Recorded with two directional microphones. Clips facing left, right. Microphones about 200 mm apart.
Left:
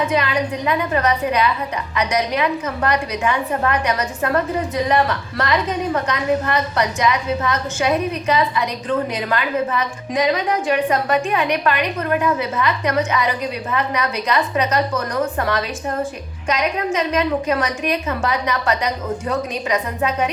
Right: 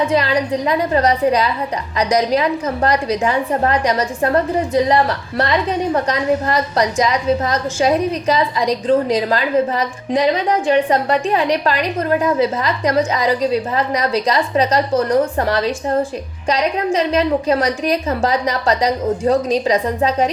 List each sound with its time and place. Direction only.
0.1 s a woman's voice: 35° right (ahead or behind)